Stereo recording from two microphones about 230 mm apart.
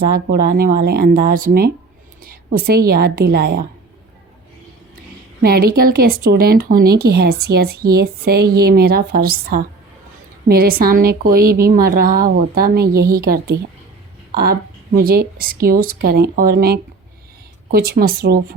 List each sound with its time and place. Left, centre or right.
0.1 s a woman's voice: right
5.4 s a woman's voice: right
14.9 s speech: right